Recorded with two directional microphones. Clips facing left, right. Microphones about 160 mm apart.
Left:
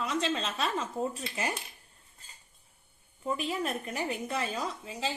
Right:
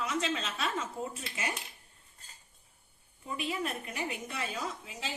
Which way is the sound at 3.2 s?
40° left (ahead or behind).